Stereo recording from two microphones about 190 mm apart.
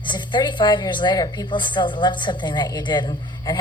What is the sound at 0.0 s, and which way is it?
A woman's voice, 25° left (ahead or behind).